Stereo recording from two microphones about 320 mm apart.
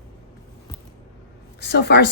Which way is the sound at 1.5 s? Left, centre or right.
Left.